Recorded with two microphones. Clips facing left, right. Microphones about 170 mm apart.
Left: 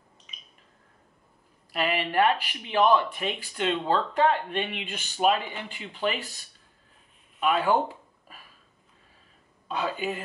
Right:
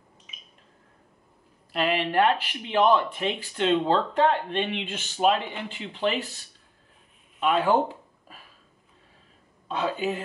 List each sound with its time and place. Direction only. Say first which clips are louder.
0.3 s a sound: left 1 dB; 5° right (ahead or behind)
1.7 s speech: right 2 dB; 5° left (ahead or behind)
7.3 s speech: right 1 dB; centre (ahead or behind)
9.7 s speech: right 2 dB; 5° left (ahead or behind)